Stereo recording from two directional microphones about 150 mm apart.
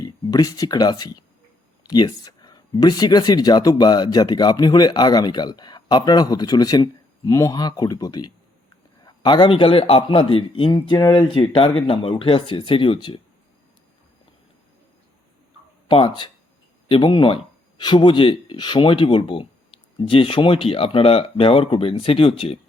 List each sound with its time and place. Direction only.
0.0 s speech: 25° left (ahead or behind)
15.9 s speech: 35° left (ahead or behind)